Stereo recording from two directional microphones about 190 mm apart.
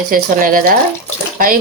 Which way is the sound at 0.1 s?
45° right (ahead or behind).